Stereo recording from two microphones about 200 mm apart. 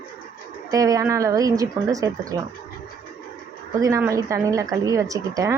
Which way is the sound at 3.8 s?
15° right (ahead or behind).